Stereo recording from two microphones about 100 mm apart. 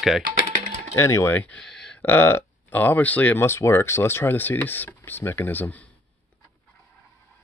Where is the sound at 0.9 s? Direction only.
25° left (ahead or behind); by 2.0 s 10° left (ahead or behind).